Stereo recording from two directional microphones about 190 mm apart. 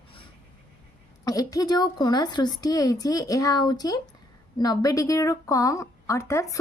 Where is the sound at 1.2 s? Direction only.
20° left (ahead or behind).